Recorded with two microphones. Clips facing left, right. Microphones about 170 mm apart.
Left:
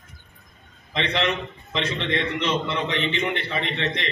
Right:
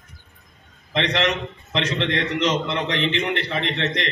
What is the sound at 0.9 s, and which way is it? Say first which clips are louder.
A man's voice: right 2 dB; 85° right.